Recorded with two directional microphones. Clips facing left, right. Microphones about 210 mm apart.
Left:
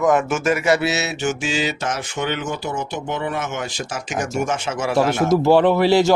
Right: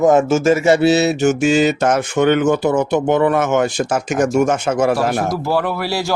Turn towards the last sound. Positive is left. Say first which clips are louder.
# left 6 dB
turn(degrees=20)  # may be behind; listen again after turning